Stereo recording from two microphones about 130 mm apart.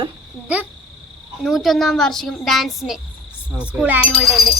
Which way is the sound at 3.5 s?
10° right (ahead or behind).